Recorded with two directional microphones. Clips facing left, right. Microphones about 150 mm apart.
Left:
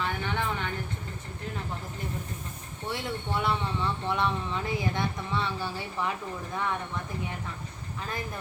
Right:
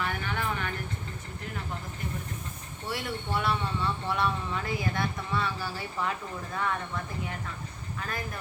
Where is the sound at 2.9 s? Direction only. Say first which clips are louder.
Even; 20° left (ahead or behind).